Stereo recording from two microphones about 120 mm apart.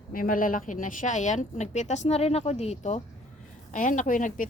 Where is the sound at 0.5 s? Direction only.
90° left; by 3.0 s 70° left (ahead or behind).